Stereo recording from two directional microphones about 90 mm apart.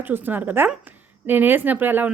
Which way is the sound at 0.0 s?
20° right (ahead or behind).